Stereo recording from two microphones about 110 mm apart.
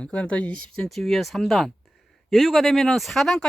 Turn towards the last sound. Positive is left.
turn(degrees=5)  # may be behind; listen again after turning